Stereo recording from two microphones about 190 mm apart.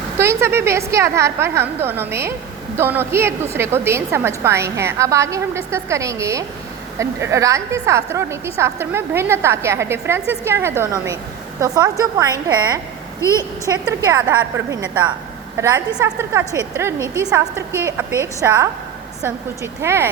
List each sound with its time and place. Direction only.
0.2 s a woman's voice: 15° right (ahead or behind)
19.8 s a woman's voice: 15° right (ahead or behind)